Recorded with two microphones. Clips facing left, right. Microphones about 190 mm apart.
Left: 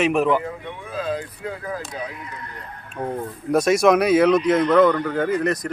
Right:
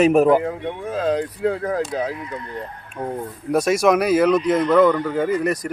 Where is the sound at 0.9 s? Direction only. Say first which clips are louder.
Right 5 dB; 80° right.